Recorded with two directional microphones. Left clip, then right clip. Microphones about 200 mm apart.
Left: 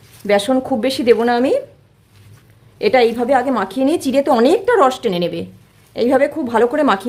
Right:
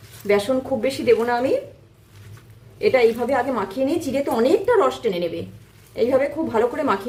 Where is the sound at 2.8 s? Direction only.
50° left (ahead or behind).